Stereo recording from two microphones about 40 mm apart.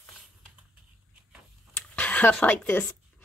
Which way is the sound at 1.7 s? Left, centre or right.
Left.